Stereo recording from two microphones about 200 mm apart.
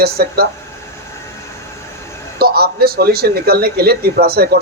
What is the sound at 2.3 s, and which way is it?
A man's voice, 50° right (ahead or behind).